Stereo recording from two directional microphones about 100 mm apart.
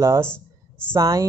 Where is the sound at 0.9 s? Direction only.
30° right (ahead or behind).